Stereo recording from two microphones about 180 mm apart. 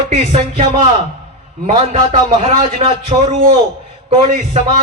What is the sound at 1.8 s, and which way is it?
A man's voice, 30° right (ahead or behind).